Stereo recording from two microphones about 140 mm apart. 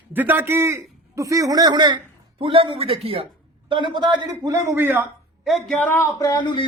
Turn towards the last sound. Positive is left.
turn(degrees=35)  # may be behind; listen again after turning